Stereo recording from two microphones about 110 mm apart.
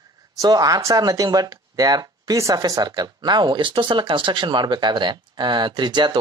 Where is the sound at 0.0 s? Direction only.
35° right (ahead or behind).